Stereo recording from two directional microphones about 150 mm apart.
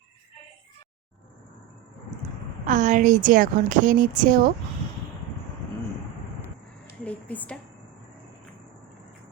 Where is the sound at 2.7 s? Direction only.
55° right (ahead or behind).